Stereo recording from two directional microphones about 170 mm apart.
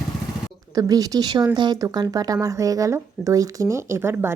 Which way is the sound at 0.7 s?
20° right (ahead or behind).